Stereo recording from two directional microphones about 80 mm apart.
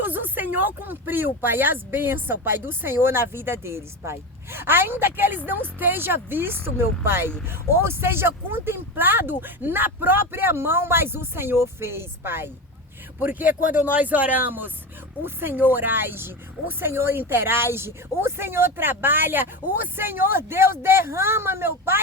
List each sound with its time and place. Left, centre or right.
0.0 s speech: right